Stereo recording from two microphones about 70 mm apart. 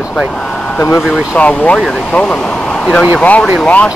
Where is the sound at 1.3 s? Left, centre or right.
Left.